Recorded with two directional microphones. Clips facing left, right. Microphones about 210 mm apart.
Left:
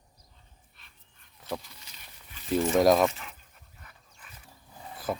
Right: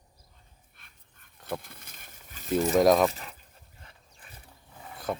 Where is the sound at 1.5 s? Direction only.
55° right (ahead or behind).